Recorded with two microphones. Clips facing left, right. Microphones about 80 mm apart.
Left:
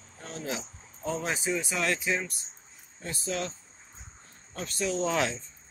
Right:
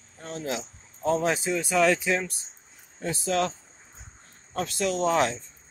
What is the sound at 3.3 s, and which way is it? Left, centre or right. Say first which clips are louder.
Speech: right 7 dB; right.